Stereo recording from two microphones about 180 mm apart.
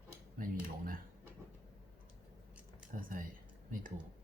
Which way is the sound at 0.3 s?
50° right (ahead or behind).